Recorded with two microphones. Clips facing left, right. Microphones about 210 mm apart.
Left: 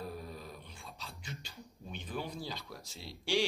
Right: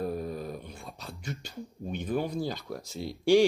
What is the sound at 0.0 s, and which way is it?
Speech, 50° right (ahead or behind).